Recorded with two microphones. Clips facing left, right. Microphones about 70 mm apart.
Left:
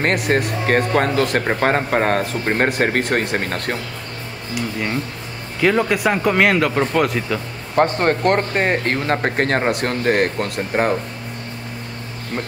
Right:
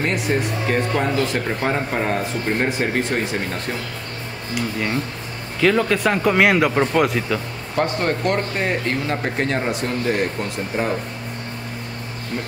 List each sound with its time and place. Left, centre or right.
0.0 s speech: left
5.6 s speech: centre
7.7 s speech: left